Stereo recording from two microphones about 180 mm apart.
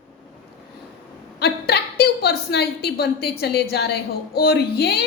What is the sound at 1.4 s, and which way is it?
A woman's voice, 65° left (ahead or behind).